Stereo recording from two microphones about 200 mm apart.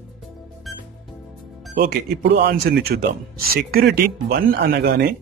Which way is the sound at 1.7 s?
55° right (ahead or behind).